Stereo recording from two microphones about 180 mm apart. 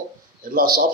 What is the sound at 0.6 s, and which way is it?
Speech, 50° right (ahead or behind).